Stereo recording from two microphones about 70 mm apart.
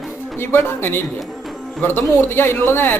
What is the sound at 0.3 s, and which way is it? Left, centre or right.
A man's voice, left.